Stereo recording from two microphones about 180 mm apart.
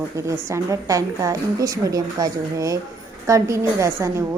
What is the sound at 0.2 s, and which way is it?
A woman's voice, 15° right (ahead or behind).